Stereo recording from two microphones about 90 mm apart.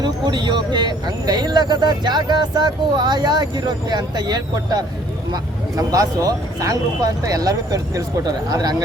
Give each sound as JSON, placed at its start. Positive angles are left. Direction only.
{"t": 0.0, "sound": "speech", "side_deg": -55}